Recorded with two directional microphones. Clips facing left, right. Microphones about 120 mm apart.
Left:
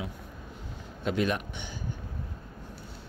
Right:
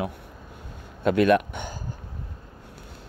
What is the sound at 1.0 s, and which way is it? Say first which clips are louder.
Speech: right 9 dB; 60° right (ahead or behind).